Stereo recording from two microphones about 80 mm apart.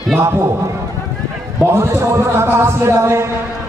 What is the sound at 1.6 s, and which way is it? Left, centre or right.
A man's voice, right.